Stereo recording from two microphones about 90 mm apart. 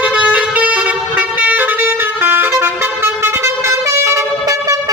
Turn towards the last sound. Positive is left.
turn(degrees=-40)  # may be behind; listen again after turning